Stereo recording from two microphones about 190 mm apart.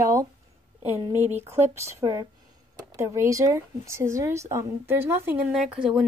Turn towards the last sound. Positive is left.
turn(degrees=-5)  # may be behind; listen again after turning